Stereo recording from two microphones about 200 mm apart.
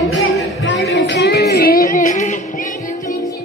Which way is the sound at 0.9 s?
60° left (ahead or behind).